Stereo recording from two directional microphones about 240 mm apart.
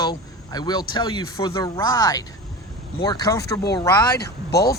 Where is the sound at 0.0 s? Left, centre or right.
Centre.